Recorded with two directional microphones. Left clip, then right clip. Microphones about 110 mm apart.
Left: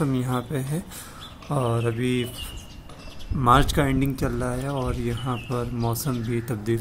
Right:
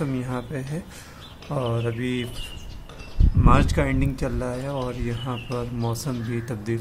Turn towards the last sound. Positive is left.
turn(degrees=20)  # may be behind; listen again after turning